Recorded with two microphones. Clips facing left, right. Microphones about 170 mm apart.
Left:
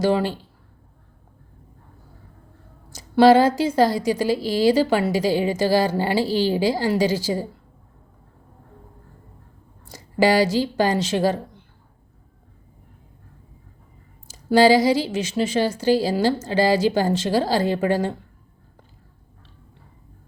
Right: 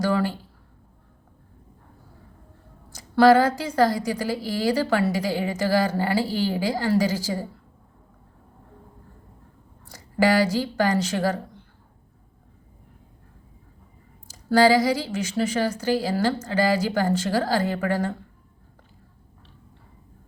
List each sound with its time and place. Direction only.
0.0 s speech: 25° left (ahead or behind)
2.9 s speech: 25° left (ahead or behind)
9.8 s speech: 25° left (ahead or behind)
14.3 s speech: 25° left (ahead or behind)